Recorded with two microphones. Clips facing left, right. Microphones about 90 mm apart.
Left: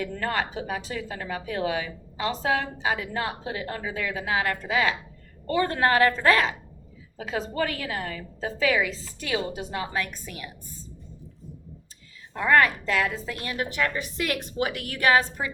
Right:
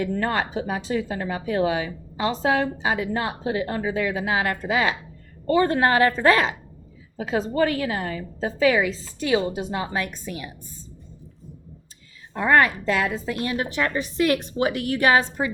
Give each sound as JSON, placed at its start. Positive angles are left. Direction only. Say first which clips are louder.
{"t": 0.0, "sound": "speech", "louder": "right 4 dB", "side_deg": -25}
{"t": 12.3, "sound": "speech", "louder": "right 2 dB", "side_deg": -25}